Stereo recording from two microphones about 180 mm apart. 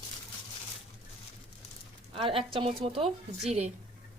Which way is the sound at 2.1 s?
30° right (ahead or behind).